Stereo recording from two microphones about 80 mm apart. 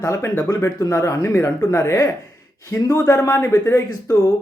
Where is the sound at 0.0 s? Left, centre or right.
Left.